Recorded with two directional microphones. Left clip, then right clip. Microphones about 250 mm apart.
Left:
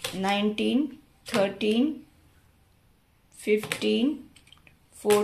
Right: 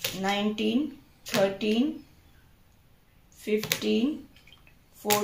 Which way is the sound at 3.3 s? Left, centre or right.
Left.